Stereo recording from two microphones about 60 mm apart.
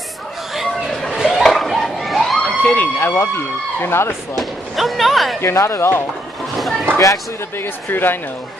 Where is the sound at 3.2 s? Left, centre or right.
Left.